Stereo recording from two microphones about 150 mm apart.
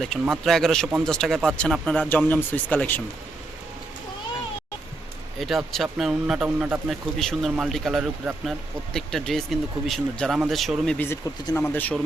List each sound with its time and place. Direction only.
0.0 s speech: centre (ahead or behind)
5.4 s speech: centre (ahead or behind)
10.9 s speech: 15° left (ahead or behind)